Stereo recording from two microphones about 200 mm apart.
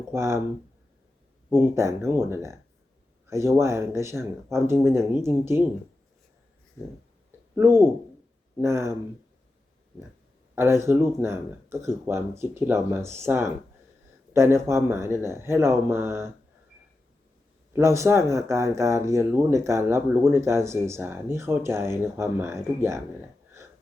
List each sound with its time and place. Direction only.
0.1 s speech: 15° right (ahead or behind)
1.5 s speech: 15° right (ahead or behind)
7.5 s speech: 15° right (ahead or behind)
10.5 s speech: 15° right (ahead or behind)
17.7 s speech: 15° right (ahead or behind)